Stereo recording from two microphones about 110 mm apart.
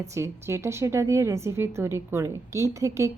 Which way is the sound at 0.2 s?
25° right (ahead or behind).